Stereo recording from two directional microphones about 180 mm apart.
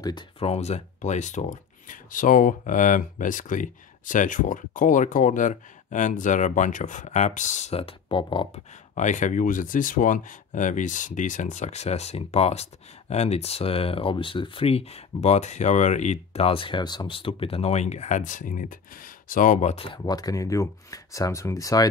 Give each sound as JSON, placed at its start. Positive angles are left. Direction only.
{"t": 0.0, "sound": "speech", "side_deg": 25}
{"t": 0.5, "sound": "speech", "side_deg": 35}
{"t": 8.9, "sound": "speech", "side_deg": 45}